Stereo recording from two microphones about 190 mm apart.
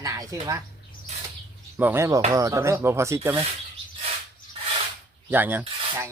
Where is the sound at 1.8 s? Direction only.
10° right (ahead or behind).